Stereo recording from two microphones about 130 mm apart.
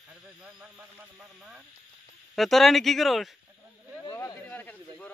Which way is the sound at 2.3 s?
Centre (ahead or behind).